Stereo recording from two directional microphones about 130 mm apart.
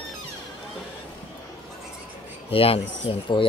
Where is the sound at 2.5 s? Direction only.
45° left (ahead or behind).